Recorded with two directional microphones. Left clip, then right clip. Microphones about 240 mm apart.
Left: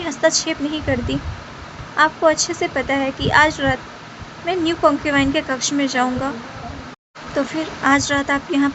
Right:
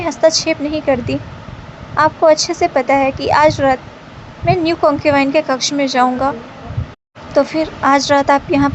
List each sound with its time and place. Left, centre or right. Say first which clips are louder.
0.0 s a woman's voice: right 5 dB; centre
7.3 s a woman's voice: right 8 dB; centre